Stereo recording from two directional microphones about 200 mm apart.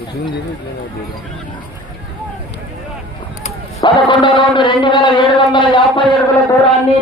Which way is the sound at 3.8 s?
25° left (ahead or behind).